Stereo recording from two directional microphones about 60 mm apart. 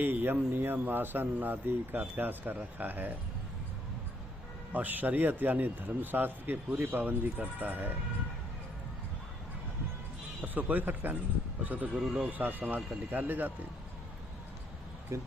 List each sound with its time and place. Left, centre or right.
0.0 s a man's voice: right
4.7 s a man's voice: right
10.4 s speech: right
15.1 s speech: right